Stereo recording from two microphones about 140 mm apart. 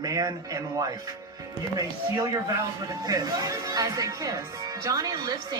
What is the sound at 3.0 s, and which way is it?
A woman's voice, 25° right (ahead or behind).